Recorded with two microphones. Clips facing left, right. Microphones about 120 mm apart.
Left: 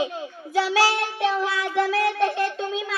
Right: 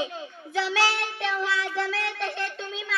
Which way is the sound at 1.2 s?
25° left (ahead or behind).